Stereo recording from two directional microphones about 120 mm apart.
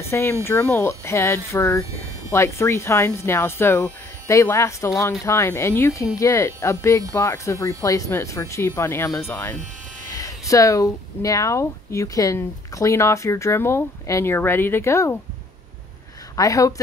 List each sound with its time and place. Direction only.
0.0 s speech: 20° left (ahead or behind)
16.3 s speech: 30° left (ahead or behind)